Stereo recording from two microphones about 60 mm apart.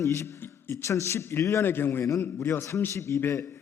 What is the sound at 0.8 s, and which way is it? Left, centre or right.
Speech, left.